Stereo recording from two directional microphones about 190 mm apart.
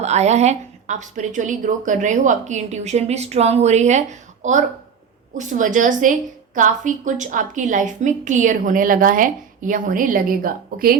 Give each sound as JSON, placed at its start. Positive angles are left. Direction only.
{"t": 0.0, "sound": "a woman's voice", "side_deg": -35}